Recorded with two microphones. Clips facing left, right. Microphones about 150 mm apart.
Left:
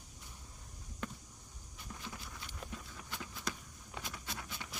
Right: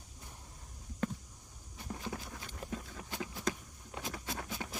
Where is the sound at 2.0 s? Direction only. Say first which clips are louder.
Right 5 dB; 45° right (ahead or behind).